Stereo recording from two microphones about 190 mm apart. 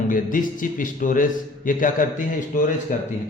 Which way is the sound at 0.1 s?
45° left (ahead or behind).